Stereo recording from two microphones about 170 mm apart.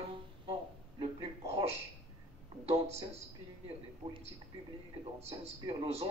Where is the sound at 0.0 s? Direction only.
35° right (ahead or behind).